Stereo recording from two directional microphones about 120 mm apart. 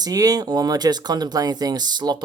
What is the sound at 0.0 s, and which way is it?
Speech, 30° right (ahead or behind).